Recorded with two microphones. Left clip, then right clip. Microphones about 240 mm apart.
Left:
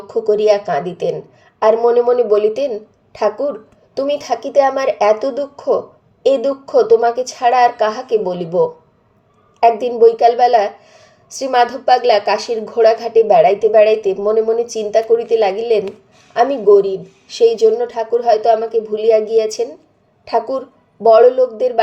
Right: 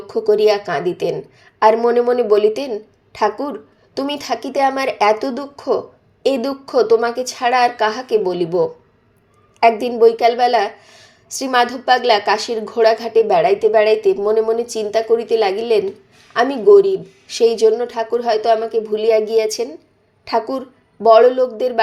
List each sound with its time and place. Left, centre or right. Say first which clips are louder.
0.1 s a woman's voice: left 1 dB; right